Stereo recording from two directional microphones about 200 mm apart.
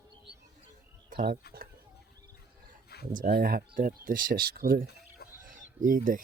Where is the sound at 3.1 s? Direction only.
45° right (ahead or behind).